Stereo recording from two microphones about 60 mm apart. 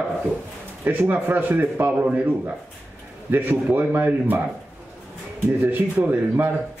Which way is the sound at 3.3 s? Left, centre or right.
Right.